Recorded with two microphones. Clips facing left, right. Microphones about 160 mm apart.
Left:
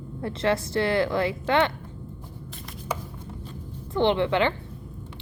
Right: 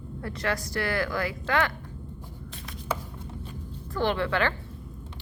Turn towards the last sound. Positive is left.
turn(degrees=20)  # may be behind; listen again after turning